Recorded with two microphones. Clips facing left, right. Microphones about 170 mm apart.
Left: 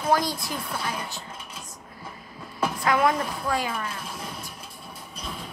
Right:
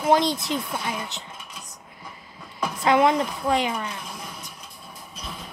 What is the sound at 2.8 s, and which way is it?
A child's voice, 25° right (ahead or behind).